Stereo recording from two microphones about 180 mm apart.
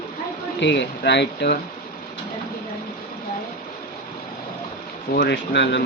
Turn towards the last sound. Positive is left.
turn(degrees=75)  # may be behind; listen again after turning